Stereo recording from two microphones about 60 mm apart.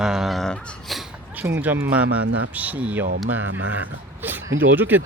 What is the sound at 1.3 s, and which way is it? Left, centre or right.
Speech, right.